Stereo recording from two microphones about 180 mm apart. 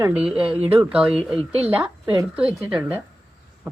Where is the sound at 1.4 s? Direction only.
35° right (ahead or behind).